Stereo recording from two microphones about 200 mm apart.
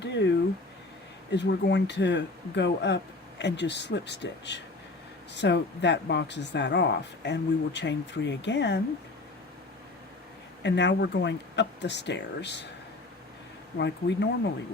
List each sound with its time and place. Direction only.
0.0 s a sound: 60° left (ahead or behind)
1.3 s speech: 60° left (ahead or behind)
10.6 s speech: 60° left (ahead or behind)
13.7 s speech: 60° left (ahead or behind)